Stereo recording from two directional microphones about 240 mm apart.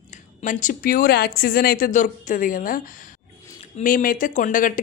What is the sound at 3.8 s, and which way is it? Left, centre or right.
Speech, left.